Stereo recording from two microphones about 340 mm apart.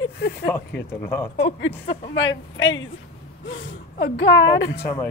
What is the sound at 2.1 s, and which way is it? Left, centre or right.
Speech, left.